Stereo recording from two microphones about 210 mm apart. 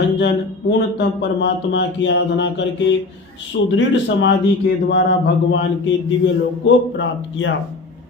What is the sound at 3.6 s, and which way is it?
Speech, 60° left (ahead or behind).